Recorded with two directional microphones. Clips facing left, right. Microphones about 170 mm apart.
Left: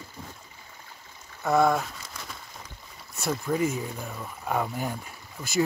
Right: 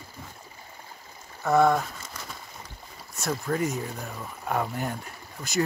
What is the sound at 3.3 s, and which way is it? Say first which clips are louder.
Speech: left 1 dB; 5° left (ahead or behind).